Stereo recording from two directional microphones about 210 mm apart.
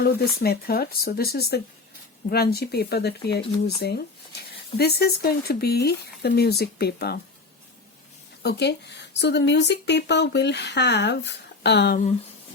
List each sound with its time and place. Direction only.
0.0 s speech: 45° left (ahead or behind)
8.4 s speech: 50° left (ahead or behind)